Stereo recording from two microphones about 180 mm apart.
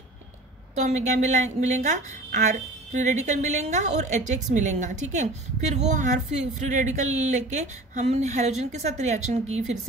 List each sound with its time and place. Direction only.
0.7 s a woman's voice: 40° right (ahead or behind)